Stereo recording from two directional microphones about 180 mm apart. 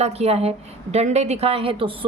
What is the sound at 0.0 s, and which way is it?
A woman's voice, 35° right (ahead or behind).